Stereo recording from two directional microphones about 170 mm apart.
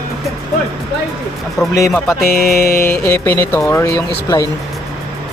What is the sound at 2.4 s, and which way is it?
Mantra, 65° left (ahead or behind).